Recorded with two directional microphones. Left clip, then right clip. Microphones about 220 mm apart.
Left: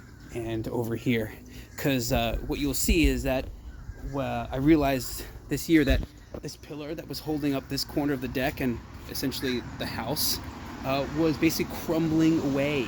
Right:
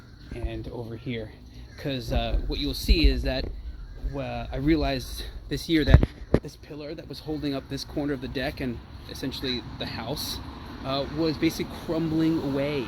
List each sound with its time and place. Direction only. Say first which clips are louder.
0.3 s speech: left 5 dB; 45° left (ahead or behind); by 12.8 s 15° left (ahead or behind)